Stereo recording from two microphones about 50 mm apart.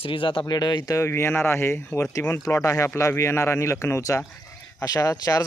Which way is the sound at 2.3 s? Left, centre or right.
Left.